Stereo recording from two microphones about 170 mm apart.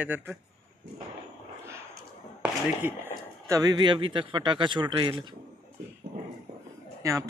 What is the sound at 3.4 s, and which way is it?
Speech, 20° right (ahead or behind).